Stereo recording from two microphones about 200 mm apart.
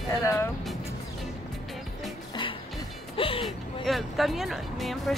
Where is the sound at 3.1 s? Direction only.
25° left (ahead or behind).